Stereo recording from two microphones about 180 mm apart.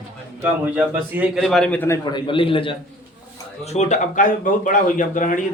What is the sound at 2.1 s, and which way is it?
A man's voice, 25° left (ahead or behind).